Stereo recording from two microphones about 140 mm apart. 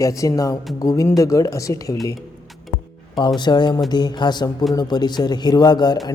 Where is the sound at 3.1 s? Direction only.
35° left (ahead or behind).